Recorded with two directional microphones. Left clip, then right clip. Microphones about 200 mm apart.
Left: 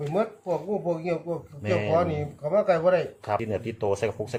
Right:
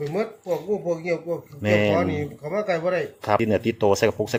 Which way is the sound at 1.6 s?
60° right (ahead or behind).